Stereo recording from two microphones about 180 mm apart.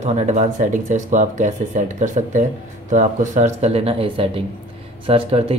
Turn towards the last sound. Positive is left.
turn(degrees=-30)  # may be behind; listen again after turning